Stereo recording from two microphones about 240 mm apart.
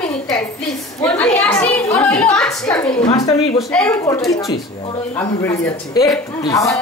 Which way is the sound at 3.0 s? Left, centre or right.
Centre.